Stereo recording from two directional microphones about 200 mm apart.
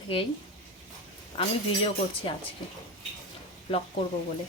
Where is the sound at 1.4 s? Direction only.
25° left (ahead or behind).